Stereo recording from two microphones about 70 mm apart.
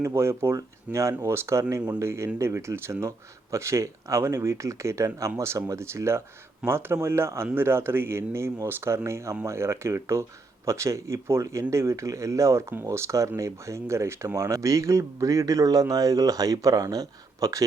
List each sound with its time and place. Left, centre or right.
0.0 s speech: right